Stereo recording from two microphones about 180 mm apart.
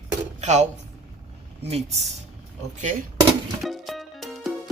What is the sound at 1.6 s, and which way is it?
Speech, 35° right (ahead or behind).